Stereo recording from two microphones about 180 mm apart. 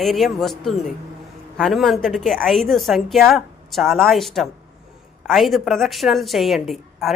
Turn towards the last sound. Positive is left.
turn(degrees=0)  # may be behind; listen again after turning